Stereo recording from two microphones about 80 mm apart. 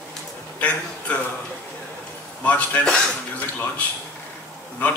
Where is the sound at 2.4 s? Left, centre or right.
Centre.